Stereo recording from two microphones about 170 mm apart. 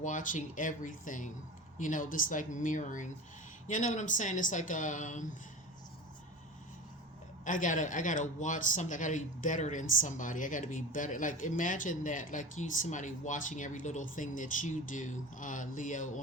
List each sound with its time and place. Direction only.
0.0 s speech: 50° left (ahead or behind)
7.4 s speech: 50° left (ahead or behind)